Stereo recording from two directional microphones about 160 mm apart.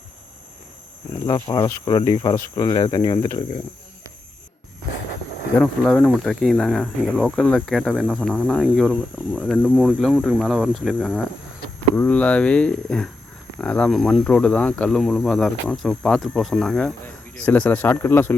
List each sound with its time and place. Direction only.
1.3 s speech: 25° left (ahead or behind)
5.5 s speech: centre (ahead or behind)